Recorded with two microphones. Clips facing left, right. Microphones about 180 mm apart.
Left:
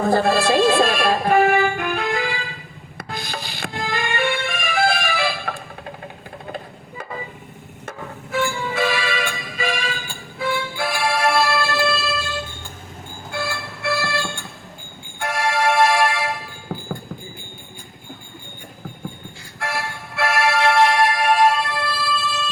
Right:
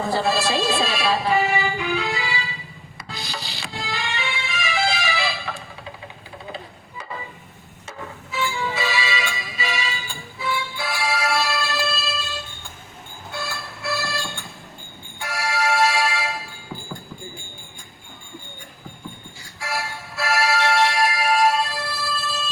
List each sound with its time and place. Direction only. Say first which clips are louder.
0.0 s music: left 5 dB; 55° left (ahead or behind)
7.9 s music: left 3 dB; 50° left (ahead or behind)
13.3 s music: left 5 dB; 55° left (ahead or behind)
15.2 s music: left 4 dB; 55° left (ahead or behind)
16.7 s clip-clop: left 6 dB; 55° left (ahead or behind)
19.5 s music: left 2 dB; 60° left (ahead or behind)